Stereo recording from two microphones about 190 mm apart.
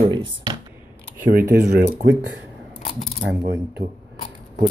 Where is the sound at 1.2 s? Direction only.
50° right (ahead or behind).